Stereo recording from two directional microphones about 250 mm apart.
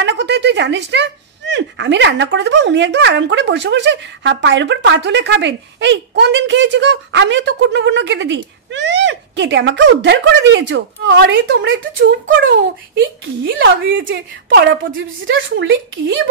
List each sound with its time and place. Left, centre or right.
0.0 s speech: right